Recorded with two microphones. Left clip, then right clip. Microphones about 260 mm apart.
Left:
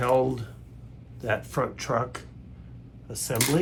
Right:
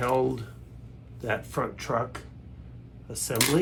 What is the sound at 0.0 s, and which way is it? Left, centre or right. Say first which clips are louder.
Speech: left 2 dB; left.